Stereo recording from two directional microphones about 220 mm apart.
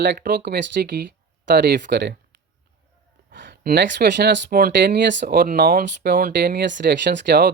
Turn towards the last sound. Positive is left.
turn(degrees=-50)  # may be behind; listen again after turning